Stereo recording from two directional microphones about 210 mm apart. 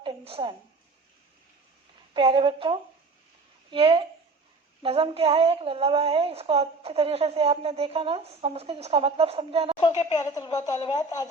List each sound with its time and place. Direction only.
0.0 s a sound: 25° right (ahead or behind)
2.1 s a woman's voice: 25° right (ahead or behind)
9.8 s a woman's voice: 20° left (ahead or behind)